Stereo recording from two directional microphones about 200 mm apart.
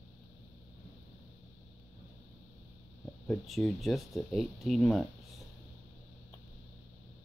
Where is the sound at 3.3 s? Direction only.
Centre (ahead or behind).